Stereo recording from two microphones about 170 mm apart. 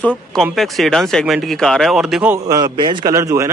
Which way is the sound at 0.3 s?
Centre (ahead or behind).